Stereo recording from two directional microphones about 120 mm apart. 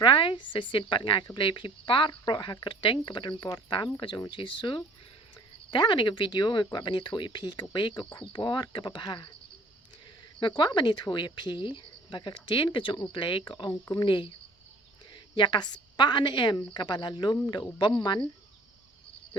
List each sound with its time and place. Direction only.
0.0 s speech: 45° left (ahead or behind)
10.6 s speech: 35° left (ahead or behind)